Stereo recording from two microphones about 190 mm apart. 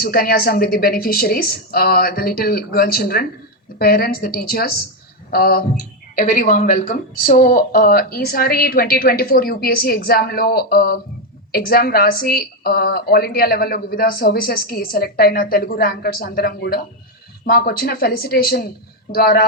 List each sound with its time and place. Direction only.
0.0 s a woman's voice: 50° left (ahead or behind)